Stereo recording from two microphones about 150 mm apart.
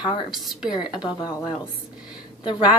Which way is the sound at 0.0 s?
30° left (ahead or behind).